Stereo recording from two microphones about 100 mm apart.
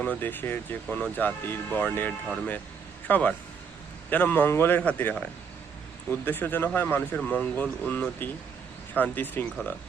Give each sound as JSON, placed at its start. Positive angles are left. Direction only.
{"t": 0.0, "sound": "speech", "side_deg": 20}